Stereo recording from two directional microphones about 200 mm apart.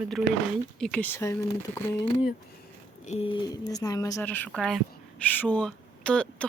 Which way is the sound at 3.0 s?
30° left (ahead or behind).